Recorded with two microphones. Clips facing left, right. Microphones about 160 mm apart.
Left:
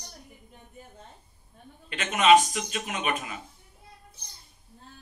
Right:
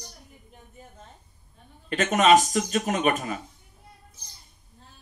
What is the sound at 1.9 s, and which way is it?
Speech, 40° right (ahead or behind).